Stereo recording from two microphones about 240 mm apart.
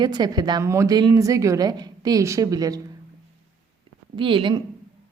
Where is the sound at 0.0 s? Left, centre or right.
Centre.